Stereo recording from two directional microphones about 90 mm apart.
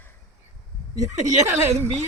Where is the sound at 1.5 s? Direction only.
30° right (ahead or behind).